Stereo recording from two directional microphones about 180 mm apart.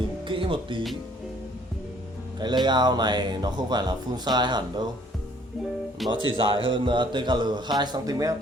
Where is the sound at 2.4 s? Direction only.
25° right (ahead or behind).